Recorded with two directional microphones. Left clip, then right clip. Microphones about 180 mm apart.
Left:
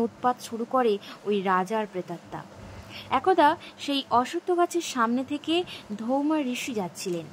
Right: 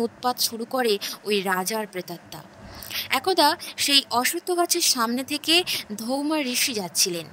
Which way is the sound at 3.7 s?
65° right (ahead or behind).